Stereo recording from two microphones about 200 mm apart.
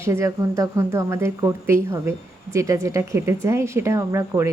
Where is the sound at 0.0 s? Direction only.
15° right (ahead or behind).